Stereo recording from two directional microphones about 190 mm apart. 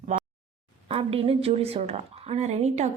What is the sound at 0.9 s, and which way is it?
A woman's voice, 30° right (ahead or behind).